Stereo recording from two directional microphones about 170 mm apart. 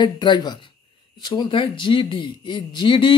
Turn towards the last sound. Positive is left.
turn(degrees=30)  # may be behind; listen again after turning